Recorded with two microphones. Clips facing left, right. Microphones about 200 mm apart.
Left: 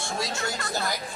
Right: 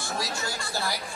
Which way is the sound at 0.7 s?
20° left (ahead or behind).